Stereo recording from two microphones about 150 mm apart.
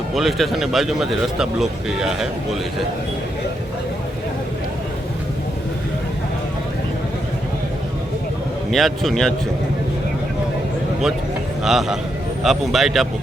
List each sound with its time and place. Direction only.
0.1 s speech: centre (ahead or behind)
8.7 s speech: centre (ahead or behind)
11.6 s speech: 5° right (ahead or behind)